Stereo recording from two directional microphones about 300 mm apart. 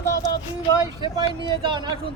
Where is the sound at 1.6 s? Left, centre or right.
Centre.